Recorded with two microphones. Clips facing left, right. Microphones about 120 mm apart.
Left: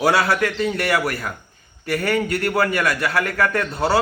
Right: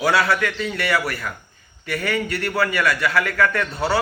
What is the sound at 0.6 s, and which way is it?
A man's voice, 55° left (ahead or behind).